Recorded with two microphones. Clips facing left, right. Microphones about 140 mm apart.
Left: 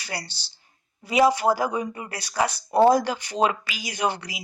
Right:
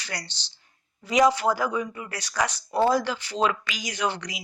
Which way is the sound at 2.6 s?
30° left (ahead or behind).